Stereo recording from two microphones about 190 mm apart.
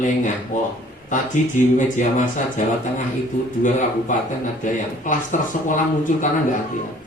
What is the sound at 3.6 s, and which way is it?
Speech, 40° left (ahead or behind).